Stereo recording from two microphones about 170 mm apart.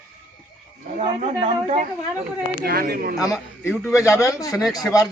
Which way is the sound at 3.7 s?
15° left (ahead or behind).